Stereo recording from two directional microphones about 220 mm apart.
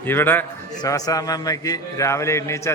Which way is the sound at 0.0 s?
10° left (ahead or behind).